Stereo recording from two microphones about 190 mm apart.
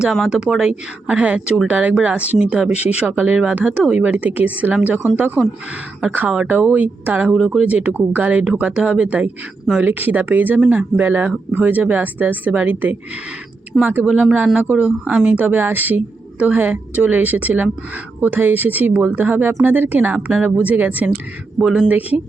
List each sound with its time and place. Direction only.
0.0 s speech: 5° right (ahead or behind)